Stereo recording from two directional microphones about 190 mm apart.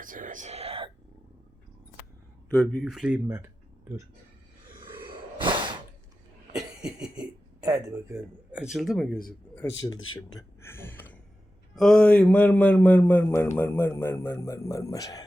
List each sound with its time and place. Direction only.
0.0 s whispering: 45° right (ahead or behind)
2.5 s speech: 5° left (ahead or behind); by 4.0 s 15° right (ahead or behind)
4.8 s a sound: 25° right (ahead or behind)
6.5 s cough: 5° right (ahead or behind)
7.6 s speech: 20° right (ahead or behind)
8.7 s speech: centre (ahead or behind)
9.8 s speech: 20° left (ahead or behind)
10.3 s a sound: 15° left (ahead or behind)
11.8 s a man's voice: 5° left (ahead or behind)